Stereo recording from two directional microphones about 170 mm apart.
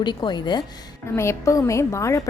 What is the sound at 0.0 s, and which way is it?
A woman's voice, 25° left (ahead or behind).